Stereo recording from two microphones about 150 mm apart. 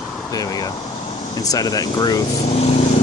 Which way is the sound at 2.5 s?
45° left (ahead or behind).